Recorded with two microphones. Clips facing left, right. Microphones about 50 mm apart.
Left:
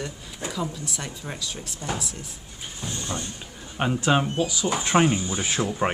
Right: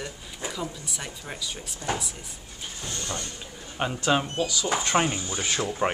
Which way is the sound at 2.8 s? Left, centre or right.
Left.